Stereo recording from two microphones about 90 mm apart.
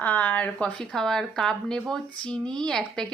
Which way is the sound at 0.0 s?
20° left (ahead or behind).